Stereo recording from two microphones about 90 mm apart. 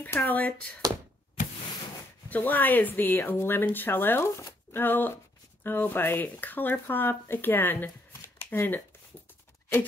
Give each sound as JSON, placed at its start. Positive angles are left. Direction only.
{"t": 0.1, "sound": "speech", "side_deg": 20}
{"t": 2.2, "sound": "speech", "side_deg": 20}